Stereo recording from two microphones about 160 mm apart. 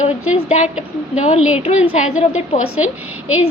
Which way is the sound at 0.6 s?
5° right (ahead or behind).